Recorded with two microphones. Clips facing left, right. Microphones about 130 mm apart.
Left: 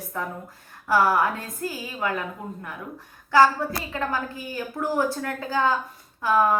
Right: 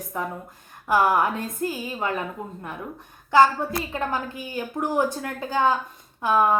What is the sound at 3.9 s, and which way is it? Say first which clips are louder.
A woman's voice: right 1 dB; 20° right (ahead or behind).